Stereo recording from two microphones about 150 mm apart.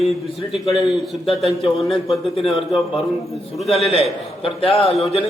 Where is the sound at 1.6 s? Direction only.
40° left (ahead or behind).